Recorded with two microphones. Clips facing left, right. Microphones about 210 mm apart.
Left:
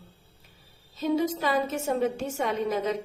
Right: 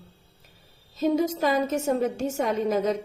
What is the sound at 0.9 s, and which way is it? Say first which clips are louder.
A woman's voice: right 2 dB; 45° right (ahead or behind).